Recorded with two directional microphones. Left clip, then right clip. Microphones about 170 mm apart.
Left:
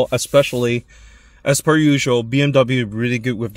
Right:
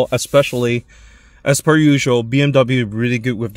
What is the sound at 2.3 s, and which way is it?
Speech, 25° right (ahead or behind).